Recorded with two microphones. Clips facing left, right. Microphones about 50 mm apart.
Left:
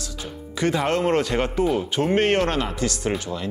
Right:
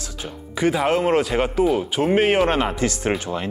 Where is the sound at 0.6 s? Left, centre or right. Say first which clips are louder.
Right 2 dB; centre.